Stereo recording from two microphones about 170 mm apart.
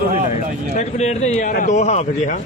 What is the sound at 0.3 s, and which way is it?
A man's voice, 40° left (ahead or behind).